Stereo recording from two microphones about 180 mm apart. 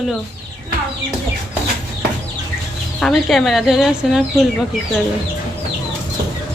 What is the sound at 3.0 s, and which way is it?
A woman's voice, centre (ahead or behind).